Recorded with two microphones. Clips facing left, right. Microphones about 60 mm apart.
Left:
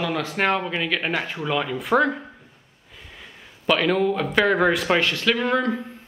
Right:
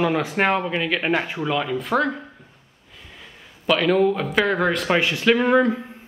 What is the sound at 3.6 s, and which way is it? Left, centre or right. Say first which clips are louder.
Speech: right 2 dB; centre.